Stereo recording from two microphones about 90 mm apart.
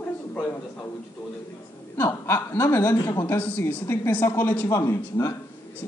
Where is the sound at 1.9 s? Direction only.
25° left (ahead or behind).